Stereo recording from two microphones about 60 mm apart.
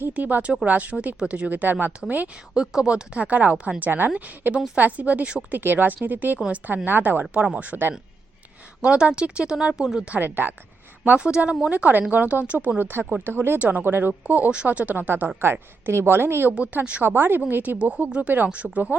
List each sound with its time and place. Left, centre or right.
0.1 s speech: right
2.6 s a woman's voice: centre
5.5 s a woman's voice: right; by 10.0 s centre
10.2 s a woman's voice: right
11.0 s speech: right
11.7 s a woman's voice: right
16.6 s speech: right
17.1 s a woman's voice: right